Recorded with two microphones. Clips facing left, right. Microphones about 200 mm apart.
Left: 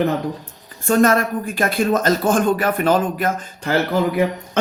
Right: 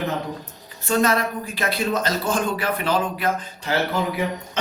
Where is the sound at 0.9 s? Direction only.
50° left (ahead or behind).